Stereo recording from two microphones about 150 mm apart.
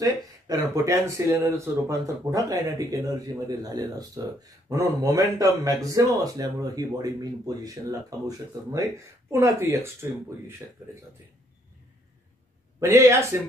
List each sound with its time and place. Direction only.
0.0 s speech: 25° right (ahead or behind)
12.8 s speech: 20° right (ahead or behind)